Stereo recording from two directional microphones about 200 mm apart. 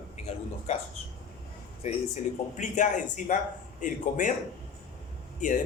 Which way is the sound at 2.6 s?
40° left (ahead or behind).